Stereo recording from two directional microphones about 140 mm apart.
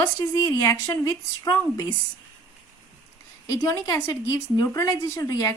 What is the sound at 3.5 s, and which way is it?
Speech, 25° left (ahead or behind).